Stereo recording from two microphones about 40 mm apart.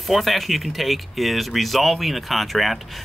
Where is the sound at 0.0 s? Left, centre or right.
Centre.